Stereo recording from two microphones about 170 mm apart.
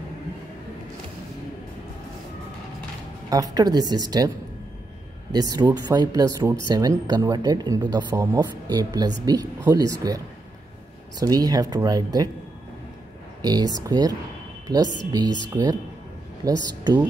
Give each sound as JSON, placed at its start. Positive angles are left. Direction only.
{"t": 3.3, "sound": "speech", "side_deg": -20}
{"t": 5.3, "sound": "speech", "side_deg": -20}
{"t": 13.4, "sound": "speech", "side_deg": -25}
{"t": 15.5, "sound": "speech", "side_deg": -25}